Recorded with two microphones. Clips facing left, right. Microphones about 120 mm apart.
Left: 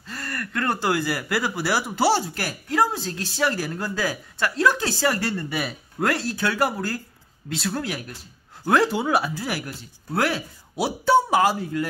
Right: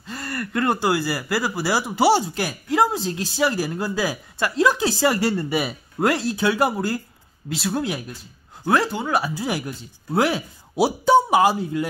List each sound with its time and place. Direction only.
0.0 s gasp: 20° right (ahead or behind)
0.8 s speech: 5° right (ahead or behind)
9.3 s speech: 20° right (ahead or behind)